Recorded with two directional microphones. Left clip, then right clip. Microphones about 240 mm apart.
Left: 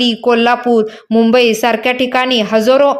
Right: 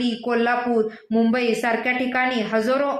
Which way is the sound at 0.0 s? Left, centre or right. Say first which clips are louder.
Left 11 dB; left.